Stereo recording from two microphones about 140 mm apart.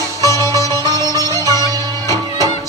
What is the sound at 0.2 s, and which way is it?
Music, 25° right (ahead or behind).